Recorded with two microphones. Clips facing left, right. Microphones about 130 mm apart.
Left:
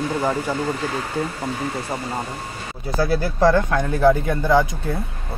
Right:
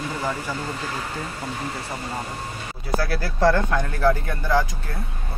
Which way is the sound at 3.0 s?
20° left (ahead or behind).